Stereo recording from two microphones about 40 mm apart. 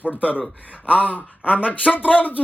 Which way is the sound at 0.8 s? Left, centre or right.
Left.